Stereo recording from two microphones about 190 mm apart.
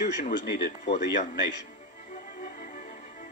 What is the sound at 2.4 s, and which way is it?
Music, 45° left (ahead or behind).